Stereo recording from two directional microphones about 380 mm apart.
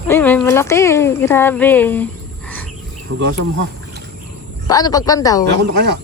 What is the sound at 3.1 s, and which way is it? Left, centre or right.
Speech, right.